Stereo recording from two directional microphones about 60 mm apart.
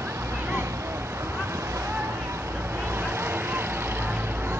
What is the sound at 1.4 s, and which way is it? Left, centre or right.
Vehicle, right.